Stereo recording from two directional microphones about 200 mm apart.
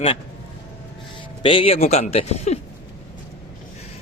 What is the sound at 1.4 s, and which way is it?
A man's voice, 25° left (ahead or behind).